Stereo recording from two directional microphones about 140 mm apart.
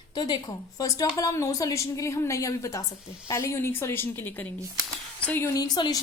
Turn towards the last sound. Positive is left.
turn(degrees=30)  # may be behind; listen again after turning